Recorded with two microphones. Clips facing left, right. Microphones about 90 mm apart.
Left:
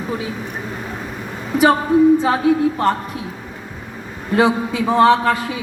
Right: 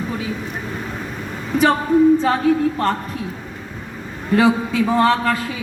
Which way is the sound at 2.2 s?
10° left (ahead or behind).